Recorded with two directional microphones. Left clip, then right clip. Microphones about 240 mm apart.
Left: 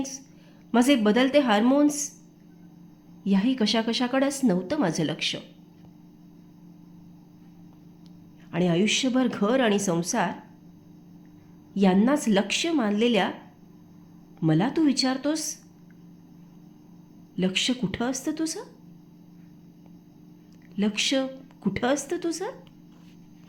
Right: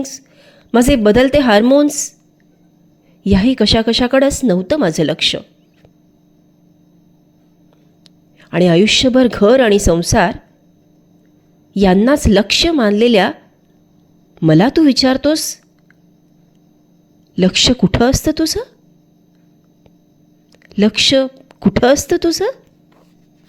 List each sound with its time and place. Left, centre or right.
0.0 s speech: right
3.2 s speech: right
8.4 s speech: right
11.7 s a woman's voice: right
14.3 s speech: right
17.3 s speech: right
20.7 s speech: right